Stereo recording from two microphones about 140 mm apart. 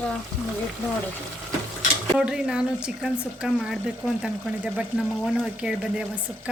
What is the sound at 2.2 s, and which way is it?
Speech, 5° right (ahead or behind).